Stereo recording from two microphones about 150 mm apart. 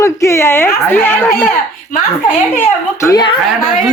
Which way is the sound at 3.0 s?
25° left (ahead or behind).